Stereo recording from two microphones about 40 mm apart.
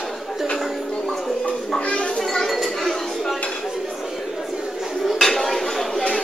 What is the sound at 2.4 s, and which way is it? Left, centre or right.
Chink, centre.